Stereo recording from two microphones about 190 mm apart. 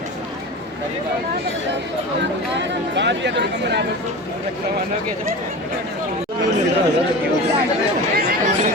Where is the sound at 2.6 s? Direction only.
70° right (ahead or behind).